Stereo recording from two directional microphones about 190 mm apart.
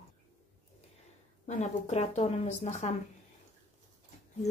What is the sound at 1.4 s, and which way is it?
A woman's voice, 35° left (ahead or behind).